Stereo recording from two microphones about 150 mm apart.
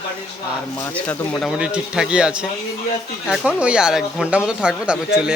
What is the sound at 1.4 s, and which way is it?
A man's voice, 5° right (ahead or behind).